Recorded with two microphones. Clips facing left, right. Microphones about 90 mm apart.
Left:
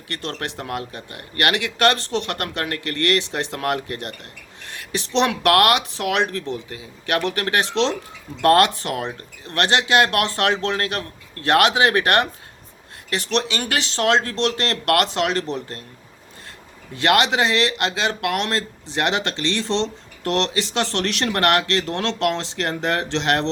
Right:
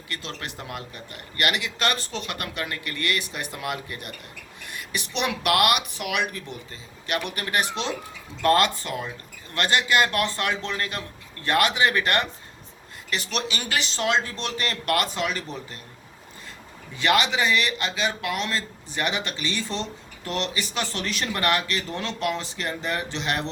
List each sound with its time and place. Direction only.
0.1 s speech: 65° left (ahead or behind); by 7.7 s 90° left
8.4 s speech: 65° left (ahead or behind)
16.9 s speech: 70° left (ahead or behind); by 23.5 s 90° left